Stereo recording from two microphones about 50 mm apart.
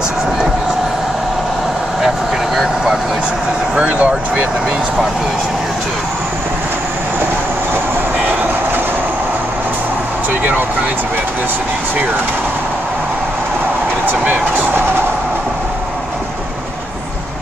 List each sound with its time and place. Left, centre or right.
2.0 s vehicle: centre
3.8 s speech: right
14.0 s speech: right